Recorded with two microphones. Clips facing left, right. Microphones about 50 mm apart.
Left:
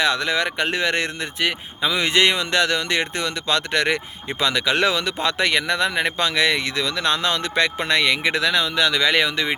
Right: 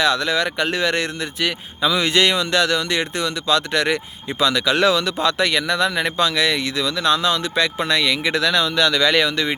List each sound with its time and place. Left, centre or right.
0.0 s speech: left